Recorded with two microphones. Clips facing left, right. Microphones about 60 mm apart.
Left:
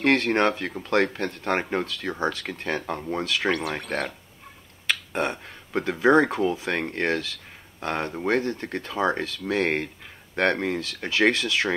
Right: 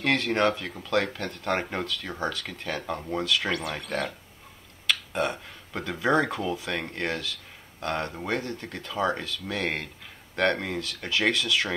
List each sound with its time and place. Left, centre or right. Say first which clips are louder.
0.0 s speech: left 3 dB; left
3.5 s speech: left 2 dB; left; by 8.4 s centre
8.4 s speech: left 7 dB; left